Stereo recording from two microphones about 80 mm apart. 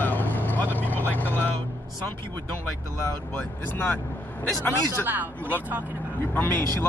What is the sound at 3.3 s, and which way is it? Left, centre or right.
Speech, left.